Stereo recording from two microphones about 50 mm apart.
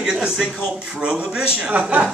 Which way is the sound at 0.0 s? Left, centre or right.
Centre.